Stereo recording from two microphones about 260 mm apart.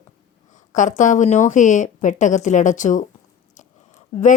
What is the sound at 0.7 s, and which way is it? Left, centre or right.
Speech, left.